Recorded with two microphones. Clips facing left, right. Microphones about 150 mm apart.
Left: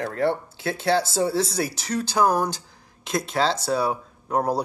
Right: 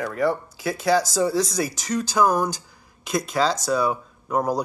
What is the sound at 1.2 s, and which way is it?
Speech, 30° left (ahead or behind).